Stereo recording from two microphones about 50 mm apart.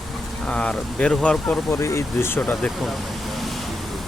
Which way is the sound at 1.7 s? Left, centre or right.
Left.